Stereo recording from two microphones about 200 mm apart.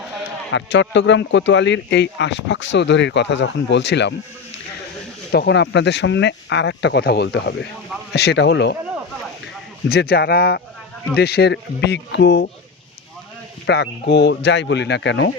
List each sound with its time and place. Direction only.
0.5 s speech: 65° left (ahead or behind)
5.3 s speech: 55° left (ahead or behind)
9.9 s speech: 50° left (ahead or behind)
13.7 s speech: 55° left (ahead or behind)